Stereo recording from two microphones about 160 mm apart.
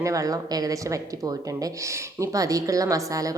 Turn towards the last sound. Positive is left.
turn(degrees=-20)  # may be behind; listen again after turning